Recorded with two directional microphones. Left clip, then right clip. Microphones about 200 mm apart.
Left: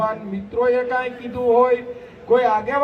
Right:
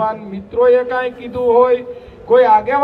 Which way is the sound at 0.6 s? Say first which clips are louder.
Right 6 dB; 35° left (ahead or behind).